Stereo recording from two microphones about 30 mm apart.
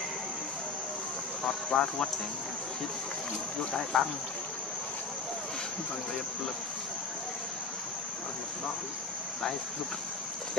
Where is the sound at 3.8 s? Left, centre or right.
Left.